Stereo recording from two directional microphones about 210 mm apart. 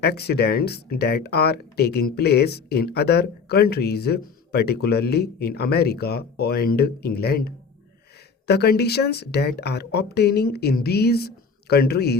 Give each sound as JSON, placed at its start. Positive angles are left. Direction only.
{"t": 0.0, "sound": "speech", "side_deg": 50}